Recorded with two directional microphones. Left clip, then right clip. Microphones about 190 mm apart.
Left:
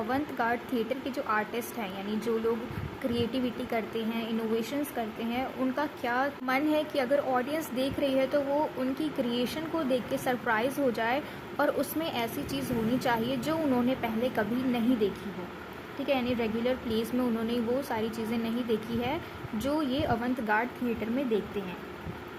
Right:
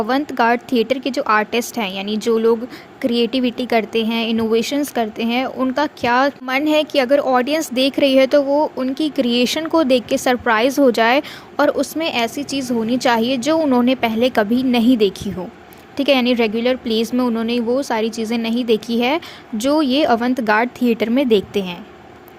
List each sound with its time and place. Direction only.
0.1 s speech: 50° right (ahead or behind)